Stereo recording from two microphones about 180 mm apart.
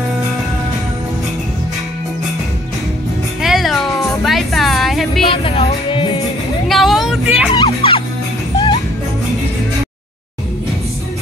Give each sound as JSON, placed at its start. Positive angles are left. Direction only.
{"t": 3.4, "sound": "music", "side_deg": 0}
{"t": 5.2, "sound": "music", "side_deg": 30}
{"t": 6.7, "sound": "vehicle", "side_deg": 0}
{"t": 7.5, "sound": "music", "side_deg": 30}